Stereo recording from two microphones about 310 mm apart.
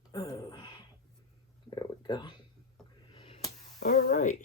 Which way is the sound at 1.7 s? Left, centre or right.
Centre.